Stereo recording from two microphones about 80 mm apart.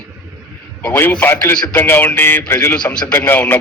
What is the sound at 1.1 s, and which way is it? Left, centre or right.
Speech, left.